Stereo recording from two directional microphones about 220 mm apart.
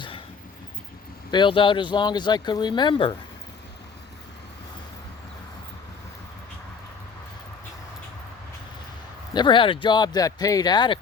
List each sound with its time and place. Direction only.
1.3 s speech: 20° left (ahead or behind)
9.3 s speech: 20° left (ahead or behind)